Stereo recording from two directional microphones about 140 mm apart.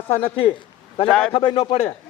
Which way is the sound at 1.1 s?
5° left (ahead or behind).